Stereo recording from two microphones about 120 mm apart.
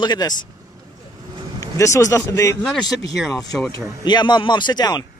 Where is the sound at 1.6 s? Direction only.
25° left (ahead or behind).